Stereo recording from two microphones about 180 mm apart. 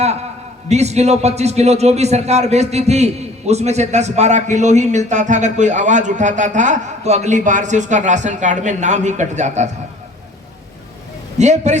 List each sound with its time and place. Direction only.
0.7 s a man's voice: 35° right (ahead or behind)
11.3 s a man's voice: 40° right (ahead or behind)